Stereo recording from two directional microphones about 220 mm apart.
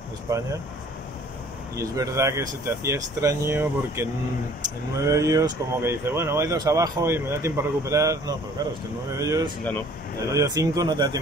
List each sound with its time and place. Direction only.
0.3 s speech: 15° right (ahead or behind)
1.8 s speech: 15° right (ahead or behind)